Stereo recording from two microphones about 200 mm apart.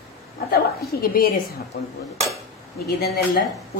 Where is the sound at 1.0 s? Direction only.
50° left (ahead or behind).